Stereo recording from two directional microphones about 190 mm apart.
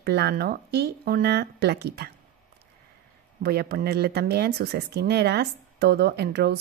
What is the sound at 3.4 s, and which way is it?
Speech, 55° right (ahead or behind).